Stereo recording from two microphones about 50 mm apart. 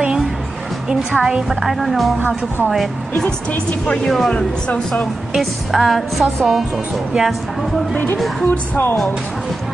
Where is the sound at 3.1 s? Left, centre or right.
Centre.